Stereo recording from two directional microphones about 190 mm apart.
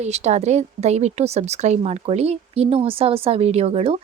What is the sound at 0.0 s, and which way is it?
A woman's voice, 35° right (ahead or behind).